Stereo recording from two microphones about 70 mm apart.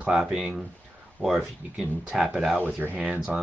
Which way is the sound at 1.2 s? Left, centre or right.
Centre.